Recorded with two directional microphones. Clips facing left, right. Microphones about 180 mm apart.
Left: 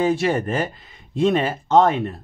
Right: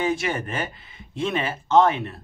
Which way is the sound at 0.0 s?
35° left (ahead or behind).